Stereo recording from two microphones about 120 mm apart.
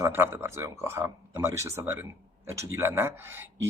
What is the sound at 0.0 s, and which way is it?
Speech, 20° right (ahead or behind).